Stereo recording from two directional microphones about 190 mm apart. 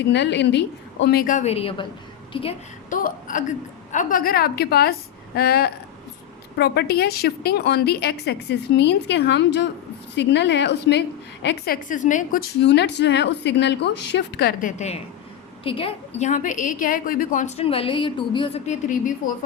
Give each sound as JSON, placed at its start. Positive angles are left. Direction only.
{"t": 0.0, "sound": "a woman's voice", "side_deg": 65}
{"t": 2.9, "sound": "a woman's voice", "side_deg": 45}
{"t": 14.7, "sound": "a woman's voice", "side_deg": 35}